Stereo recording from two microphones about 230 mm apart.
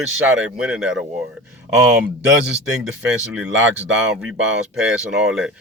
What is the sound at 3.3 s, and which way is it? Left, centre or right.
Speech, right.